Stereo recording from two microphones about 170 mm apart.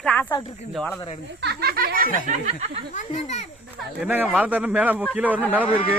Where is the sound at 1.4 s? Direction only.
70° right (ahead or behind).